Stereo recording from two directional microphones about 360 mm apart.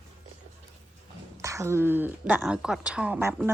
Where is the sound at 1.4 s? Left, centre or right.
Centre.